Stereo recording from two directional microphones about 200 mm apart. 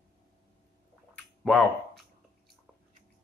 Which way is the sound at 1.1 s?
Centre (ahead or behind).